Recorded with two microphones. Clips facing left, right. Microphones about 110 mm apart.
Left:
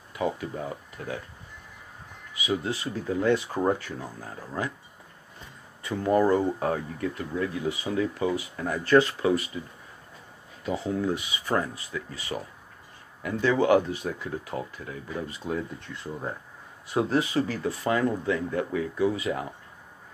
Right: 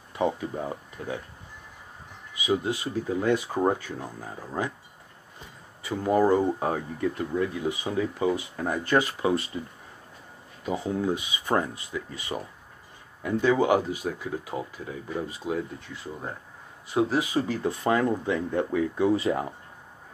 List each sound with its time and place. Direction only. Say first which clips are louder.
0.1 s speech: right 2 dB; 25° right (ahead or behind)
2.4 s speech: right 2 dB; 20° right (ahead or behind)
5.8 s speech: even; 10° right (ahead or behind)
10.6 s speech: even; 15° right (ahead or behind)